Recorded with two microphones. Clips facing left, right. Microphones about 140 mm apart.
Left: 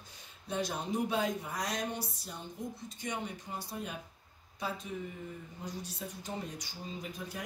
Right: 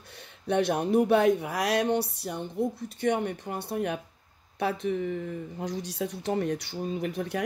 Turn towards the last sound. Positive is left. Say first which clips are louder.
# right 11 dB
turn(degrees=-70)  # may be behind; listen again after turning